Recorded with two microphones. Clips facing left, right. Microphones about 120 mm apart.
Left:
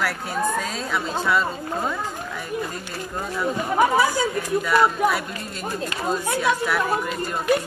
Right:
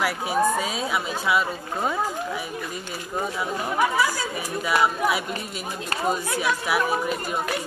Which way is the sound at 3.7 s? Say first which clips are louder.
Left 4 dB; 25° left (ahead or behind).